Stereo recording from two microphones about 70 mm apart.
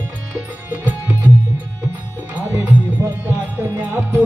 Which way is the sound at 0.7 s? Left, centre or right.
Right.